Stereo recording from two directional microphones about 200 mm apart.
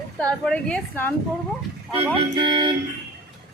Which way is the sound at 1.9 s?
25° right (ahead or behind).